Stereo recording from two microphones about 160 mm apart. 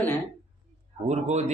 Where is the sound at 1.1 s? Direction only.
45° right (ahead or behind).